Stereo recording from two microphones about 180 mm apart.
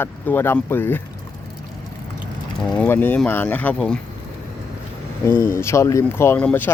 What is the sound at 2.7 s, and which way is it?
Speech, 10° left (ahead or behind).